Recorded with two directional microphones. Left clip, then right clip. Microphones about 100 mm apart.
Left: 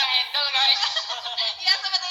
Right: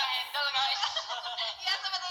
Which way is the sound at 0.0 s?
25° left (ahead or behind).